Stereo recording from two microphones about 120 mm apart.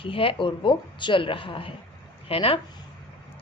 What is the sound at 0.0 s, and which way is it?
A woman's voice, 45° left (ahead or behind).